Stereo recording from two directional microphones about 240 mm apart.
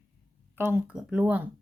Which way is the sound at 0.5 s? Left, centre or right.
Centre.